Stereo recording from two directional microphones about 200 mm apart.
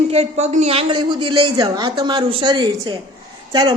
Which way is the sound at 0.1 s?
35° right (ahead or behind).